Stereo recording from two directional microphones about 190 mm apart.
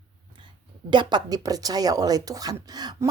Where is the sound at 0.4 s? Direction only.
25° right (ahead or behind).